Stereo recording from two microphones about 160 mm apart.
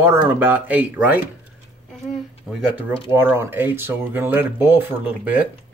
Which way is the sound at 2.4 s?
Centre (ahead or behind).